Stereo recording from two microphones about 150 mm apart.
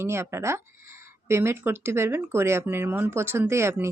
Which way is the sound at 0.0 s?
15° right (ahead or behind).